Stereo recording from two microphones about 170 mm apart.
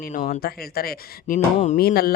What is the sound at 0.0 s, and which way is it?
A man's voice, 50° left (ahead or behind).